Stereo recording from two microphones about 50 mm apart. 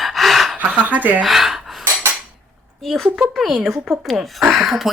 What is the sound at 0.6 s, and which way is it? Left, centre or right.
Speech, right.